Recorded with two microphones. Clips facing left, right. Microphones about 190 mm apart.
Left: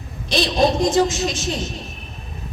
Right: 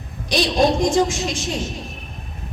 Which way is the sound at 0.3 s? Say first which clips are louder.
Even; 15° right (ahead or behind).